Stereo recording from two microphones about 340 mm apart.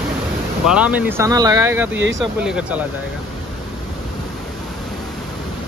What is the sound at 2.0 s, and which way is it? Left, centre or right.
Speech, right.